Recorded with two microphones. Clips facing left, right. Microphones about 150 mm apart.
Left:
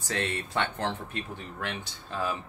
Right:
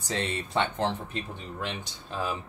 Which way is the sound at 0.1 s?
20° right (ahead or behind).